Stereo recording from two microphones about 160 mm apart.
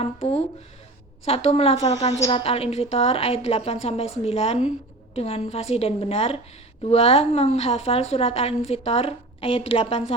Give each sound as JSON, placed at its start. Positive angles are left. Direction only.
{"t": 0.0, "sound": "a woman's voice", "side_deg": 40}
{"t": 1.8, "sound": "a woman's voice", "side_deg": 20}
{"t": 2.0, "sound": "a woman's voice", "side_deg": 35}